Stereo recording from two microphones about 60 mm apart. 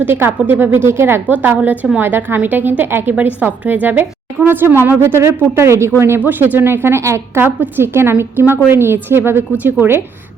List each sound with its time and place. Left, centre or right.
0.0 s a woman's voice: right
1.3 s a woman's voice: right
3.2 s a woman's voice: right
6.1 s a woman's voice: right